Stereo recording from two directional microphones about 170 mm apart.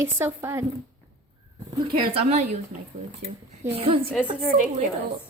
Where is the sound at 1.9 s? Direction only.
35° right (ahead or behind).